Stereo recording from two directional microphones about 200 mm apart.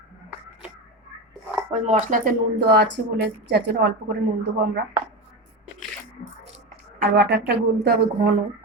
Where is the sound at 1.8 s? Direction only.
40° right (ahead or behind); by 4.1 s 55° right (ahead or behind).